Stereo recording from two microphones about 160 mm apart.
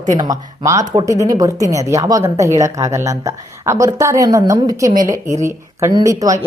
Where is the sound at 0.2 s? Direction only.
20° right (ahead or behind).